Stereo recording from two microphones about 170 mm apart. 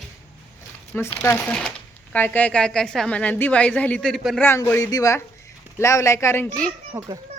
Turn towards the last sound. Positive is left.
turn(degrees=-20)  # may be behind; listen again after turning